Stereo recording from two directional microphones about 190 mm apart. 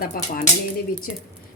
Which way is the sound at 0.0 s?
50° left (ahead or behind).